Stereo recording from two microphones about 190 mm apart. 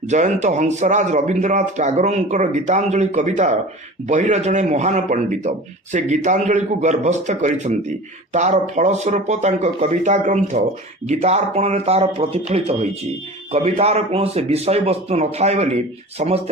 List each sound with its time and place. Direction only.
0.1 s a man's voice: 40° right (ahead or behind)